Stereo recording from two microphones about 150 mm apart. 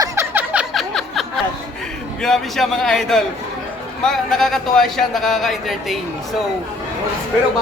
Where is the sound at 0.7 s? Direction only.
Centre (ahead or behind).